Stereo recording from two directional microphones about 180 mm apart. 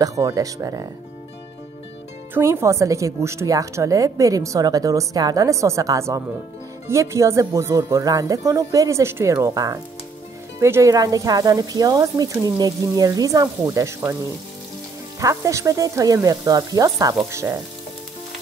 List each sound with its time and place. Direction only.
0.0 s speech: 20° right (ahead or behind)
2.3 s a woman's voice: 15° right (ahead or behind)
15.1 s speech: 20° right (ahead or behind)